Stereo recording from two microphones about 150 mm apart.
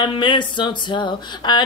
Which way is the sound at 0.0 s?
30° left (ahead or behind).